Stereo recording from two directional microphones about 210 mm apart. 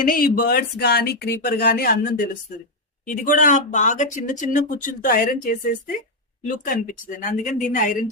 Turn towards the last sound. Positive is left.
turn(degrees=40)  # may be behind; listen again after turning